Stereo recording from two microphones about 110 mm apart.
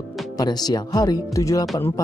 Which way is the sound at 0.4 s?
35° left (ahead or behind).